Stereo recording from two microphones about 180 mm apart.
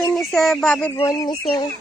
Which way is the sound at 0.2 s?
Centre (ahead or behind).